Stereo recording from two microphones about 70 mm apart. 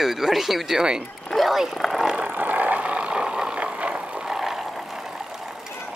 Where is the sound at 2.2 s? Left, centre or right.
Right; by 5.1 s centre.